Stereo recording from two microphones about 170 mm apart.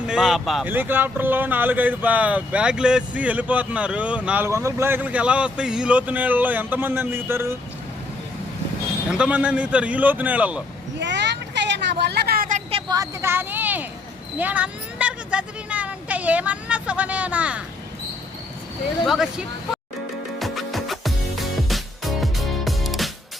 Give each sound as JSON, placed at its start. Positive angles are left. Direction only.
{"t": 0.1, "sound": "speech", "side_deg": 0}
{"t": 9.0, "sound": "speech", "side_deg": -5}
{"t": 11.0, "sound": "vehicle", "side_deg": -90}
{"t": 12.9, "sound": "speech", "side_deg": -15}
{"t": 19.0, "sound": "speech", "side_deg": 0}
{"t": 20.4, "sound": "music", "side_deg": 0}